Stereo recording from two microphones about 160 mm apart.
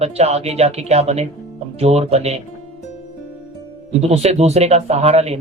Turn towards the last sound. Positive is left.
turn(degrees=-40)  # may be behind; listen again after turning